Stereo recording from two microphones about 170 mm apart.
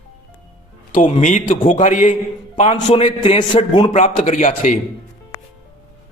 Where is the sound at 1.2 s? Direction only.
50° left (ahead or behind).